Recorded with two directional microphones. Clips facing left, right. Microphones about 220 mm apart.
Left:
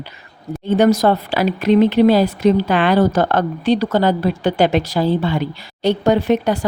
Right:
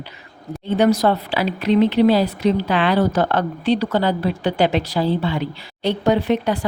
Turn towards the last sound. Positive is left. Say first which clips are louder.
# left 3 dB
turn(degrees=45)  # may be behind; listen again after turning